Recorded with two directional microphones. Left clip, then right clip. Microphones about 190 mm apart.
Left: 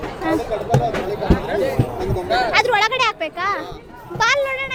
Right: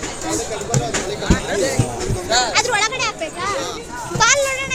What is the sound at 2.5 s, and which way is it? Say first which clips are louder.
A child's voice: left 2 dB; 15° left (ahead or behind).